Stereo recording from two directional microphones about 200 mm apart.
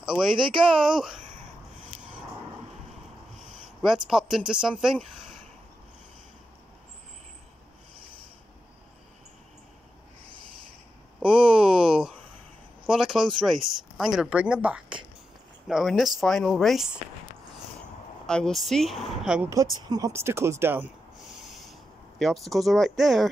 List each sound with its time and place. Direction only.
0.1 s speech: 5° right (ahead or behind)
3.8 s speech: centre (ahead or behind)
11.1 s a sound: 5° right (ahead or behind)
12.8 s speech: centre (ahead or behind)
18.2 s speech: 5° left (ahead or behind)
21.4 s a sound: centre (ahead or behind)
22.2 s speech: centre (ahead or behind)